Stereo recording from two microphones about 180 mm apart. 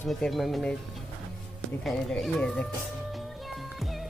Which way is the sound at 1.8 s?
Centre (ahead or behind).